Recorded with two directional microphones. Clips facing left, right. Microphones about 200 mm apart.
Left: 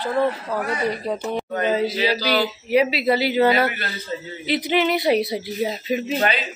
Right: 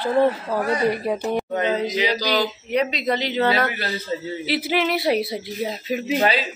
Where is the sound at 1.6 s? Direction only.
5° left (ahead or behind).